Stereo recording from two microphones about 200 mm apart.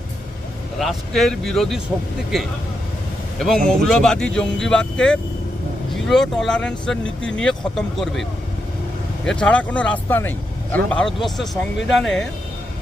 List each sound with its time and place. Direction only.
0.8 s speech: centre (ahead or behind)